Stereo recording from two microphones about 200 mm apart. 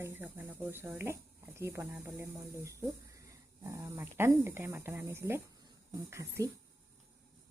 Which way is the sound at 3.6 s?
15° right (ahead or behind).